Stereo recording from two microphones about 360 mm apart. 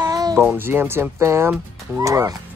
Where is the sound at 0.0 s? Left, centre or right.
Centre.